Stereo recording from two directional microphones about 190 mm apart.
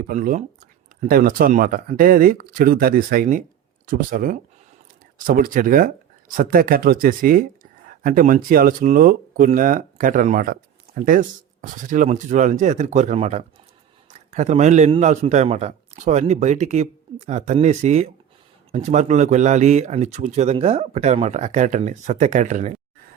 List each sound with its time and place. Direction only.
0.1 s a man's voice: 40° right (ahead or behind)